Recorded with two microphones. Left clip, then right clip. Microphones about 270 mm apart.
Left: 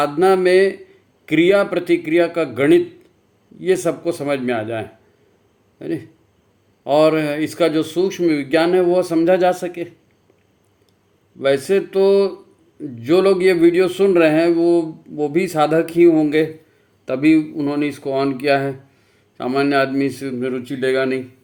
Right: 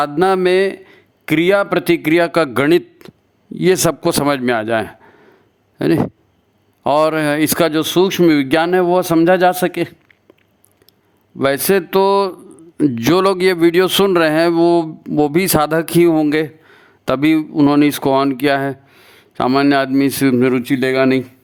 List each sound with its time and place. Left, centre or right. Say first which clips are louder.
0.0 s a man's voice: right 1 dB; right
11.3 s a man's voice: right 2 dB; right